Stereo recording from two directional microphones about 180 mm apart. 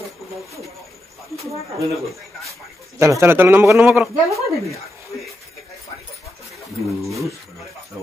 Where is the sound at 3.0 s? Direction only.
15° right (ahead or behind).